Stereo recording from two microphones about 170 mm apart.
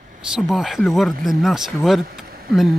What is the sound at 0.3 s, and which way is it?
Speech, centre (ahead or behind).